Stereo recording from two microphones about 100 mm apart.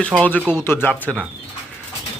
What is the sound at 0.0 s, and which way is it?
A man's voice, 10° left (ahead or behind).